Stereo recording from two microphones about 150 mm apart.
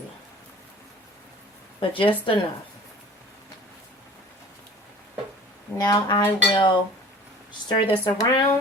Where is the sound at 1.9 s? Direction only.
35° left (ahead or behind).